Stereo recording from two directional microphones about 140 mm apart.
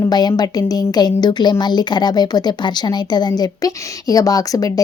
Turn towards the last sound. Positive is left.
turn(degrees=25)  # may be behind; listen again after turning